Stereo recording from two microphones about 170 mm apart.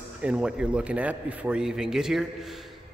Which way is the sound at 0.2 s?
5° right (ahead or behind).